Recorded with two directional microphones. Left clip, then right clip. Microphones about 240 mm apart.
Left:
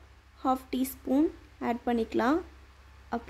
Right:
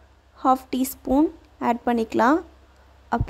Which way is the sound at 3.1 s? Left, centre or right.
Centre.